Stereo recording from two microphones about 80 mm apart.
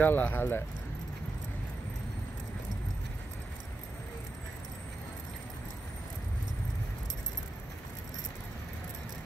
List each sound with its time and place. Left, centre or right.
0.0 s speech: left